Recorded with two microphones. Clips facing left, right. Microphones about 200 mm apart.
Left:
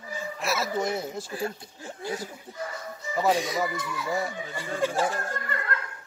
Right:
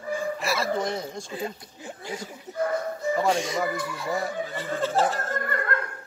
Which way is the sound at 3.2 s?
Centre (ahead or behind).